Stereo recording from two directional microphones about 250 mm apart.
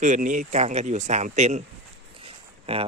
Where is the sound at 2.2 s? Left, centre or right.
Right.